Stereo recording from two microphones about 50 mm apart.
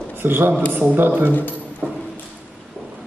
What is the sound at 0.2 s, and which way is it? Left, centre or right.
Speech, right.